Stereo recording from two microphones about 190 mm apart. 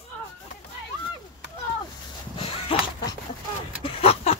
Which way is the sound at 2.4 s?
30° left (ahead or behind).